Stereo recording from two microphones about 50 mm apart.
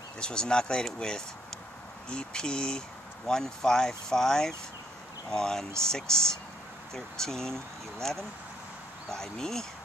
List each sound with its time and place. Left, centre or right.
0.2 s speech: centre